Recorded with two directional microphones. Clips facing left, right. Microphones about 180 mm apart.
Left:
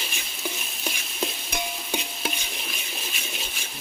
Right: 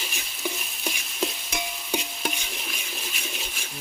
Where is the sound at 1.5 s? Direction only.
Centre (ahead or behind).